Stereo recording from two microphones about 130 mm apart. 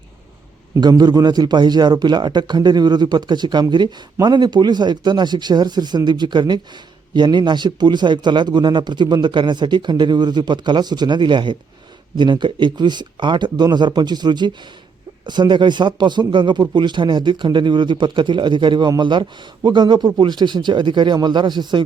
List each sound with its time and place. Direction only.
0.8 s a man's voice: 30° right (ahead or behind)